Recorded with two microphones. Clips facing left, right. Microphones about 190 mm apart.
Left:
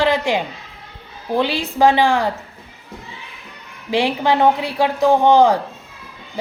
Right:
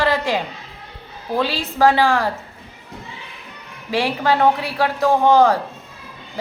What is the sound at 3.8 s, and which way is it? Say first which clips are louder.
Speech: left 2 dB; 20° left (ahead or behind).